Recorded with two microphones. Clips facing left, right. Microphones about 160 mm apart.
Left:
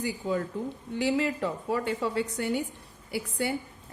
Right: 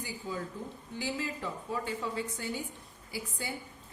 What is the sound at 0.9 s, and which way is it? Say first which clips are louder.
A woman's voice: left 9 dB; 70° left (ahead or behind).